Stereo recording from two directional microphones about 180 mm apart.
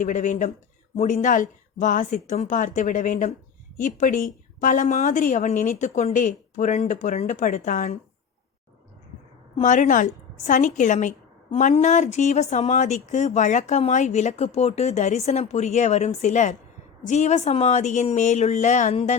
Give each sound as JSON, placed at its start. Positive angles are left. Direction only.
{"t": 0.0, "sound": "a woman's voice", "side_deg": 45}
{"t": 9.6, "sound": "a woman's voice", "side_deg": 45}